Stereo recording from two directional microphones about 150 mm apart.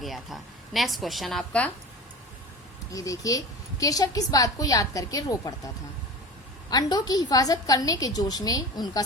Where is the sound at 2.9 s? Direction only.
20° left (ahead or behind).